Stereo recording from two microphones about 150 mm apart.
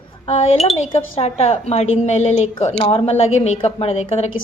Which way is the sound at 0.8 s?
40° left (ahead or behind).